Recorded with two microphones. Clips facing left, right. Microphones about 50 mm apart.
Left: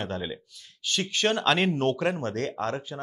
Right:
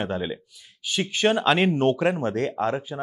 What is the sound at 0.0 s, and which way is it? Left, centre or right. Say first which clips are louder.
Speech: right 5 dB; centre.